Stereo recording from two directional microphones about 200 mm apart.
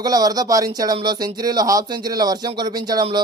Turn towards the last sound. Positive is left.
turn(degrees=-20)  # may be behind; listen again after turning